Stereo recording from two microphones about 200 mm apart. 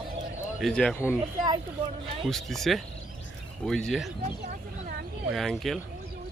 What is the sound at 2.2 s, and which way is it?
Speech, centre (ahead or behind).